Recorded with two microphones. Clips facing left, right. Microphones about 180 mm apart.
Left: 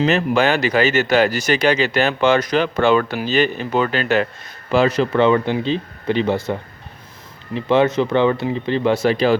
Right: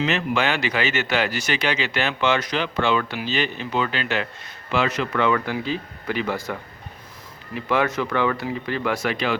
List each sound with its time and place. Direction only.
0.0 s a man's voice: 40° left (ahead or behind)